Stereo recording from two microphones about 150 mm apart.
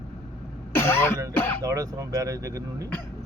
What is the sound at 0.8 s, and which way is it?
Throat clearing, 15° left (ahead or behind).